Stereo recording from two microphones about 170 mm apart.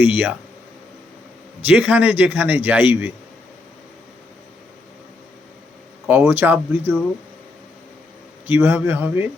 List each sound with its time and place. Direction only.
0.0 s a man's voice: 10° right (ahead or behind)
1.6 s a man's voice: 10° right (ahead or behind)
6.1 s a man's voice: 10° right (ahead or behind)
8.4 s a man's voice: 10° right (ahead or behind)